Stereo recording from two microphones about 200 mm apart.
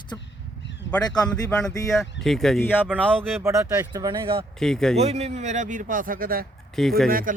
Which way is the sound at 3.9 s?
20° right (ahead or behind).